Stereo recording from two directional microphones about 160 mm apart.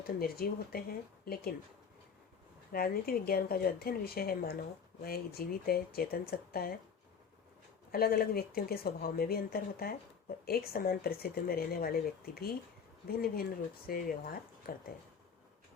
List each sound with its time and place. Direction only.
0.0 s speech: 70° left (ahead or behind)
2.7 s speech: 70° left (ahead or behind)
7.9 s speech: 70° left (ahead or behind)